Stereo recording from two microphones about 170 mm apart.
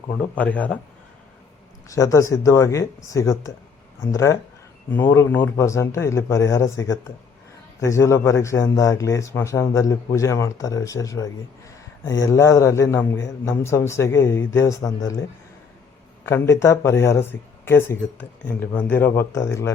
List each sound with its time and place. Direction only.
0.1 s a man's voice: 10° left (ahead or behind)
1.9 s a man's voice: 20° left (ahead or behind)
16.2 s a man's voice: 15° left (ahead or behind)